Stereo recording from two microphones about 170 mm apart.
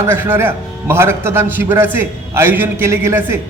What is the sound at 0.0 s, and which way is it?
A man's voice, 15° right (ahead or behind).